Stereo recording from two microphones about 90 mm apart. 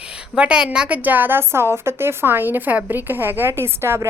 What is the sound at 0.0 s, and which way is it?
A woman's voice, 10° right (ahead or behind).